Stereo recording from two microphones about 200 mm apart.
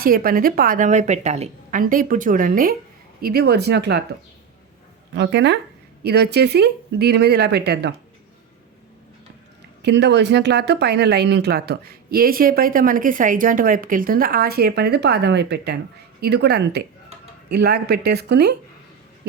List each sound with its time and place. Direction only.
0.0 s speech: 45° right (ahead or behind)
5.1 s speech: 60° right (ahead or behind)
9.8 s speech: 60° right (ahead or behind)